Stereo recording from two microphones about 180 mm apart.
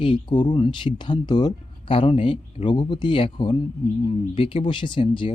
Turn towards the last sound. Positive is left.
turn(degrees=30)  # may be behind; listen again after turning